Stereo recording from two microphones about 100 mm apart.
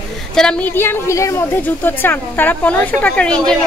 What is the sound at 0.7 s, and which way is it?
Speech, 20° left (ahead or behind).